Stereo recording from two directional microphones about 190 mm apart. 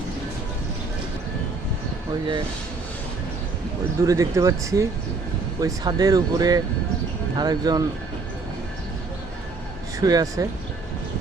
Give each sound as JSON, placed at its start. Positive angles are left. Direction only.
{"t": 4.0, "sound": "speech", "side_deg": -15}
{"t": 10.0, "sound": "speech", "side_deg": -20}